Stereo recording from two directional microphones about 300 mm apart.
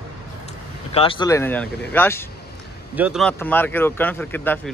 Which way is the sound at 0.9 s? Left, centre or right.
Centre.